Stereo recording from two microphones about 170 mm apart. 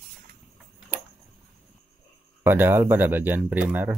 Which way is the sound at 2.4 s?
10° right (ahead or behind).